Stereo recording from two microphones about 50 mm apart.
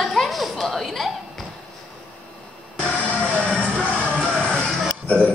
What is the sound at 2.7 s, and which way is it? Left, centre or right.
Music, left.